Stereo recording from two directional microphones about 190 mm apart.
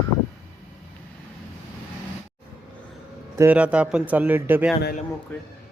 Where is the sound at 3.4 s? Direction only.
10° right (ahead or behind).